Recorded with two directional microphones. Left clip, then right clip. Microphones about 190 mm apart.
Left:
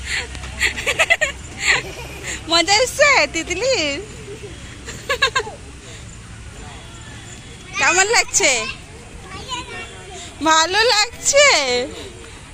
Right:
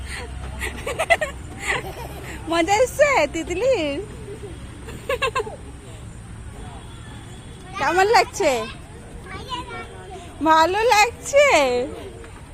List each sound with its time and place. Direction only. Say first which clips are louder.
0.1 s a sound: left 10 dB; 10° right (ahead or behind)
2.3 s speech: left 4 dB; 10° right (ahead or behind)
4.9 s a sound: left 4 dB; 20° right (ahead or behind)
7.8 s speech: left 1 dB; 20° right (ahead or behind)
10.4 s speech: left 1 dB; 5° right (ahead or behind)
11.5 s a child's voice: even; 5° right (ahead or behind)